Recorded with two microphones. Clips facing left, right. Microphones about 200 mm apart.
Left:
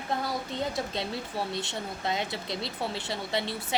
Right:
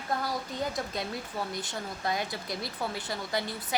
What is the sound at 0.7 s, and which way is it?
Speech, 25° left (ahead or behind).